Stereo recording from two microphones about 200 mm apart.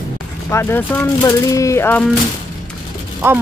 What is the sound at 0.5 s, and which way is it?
Speech, 15° left (ahead or behind).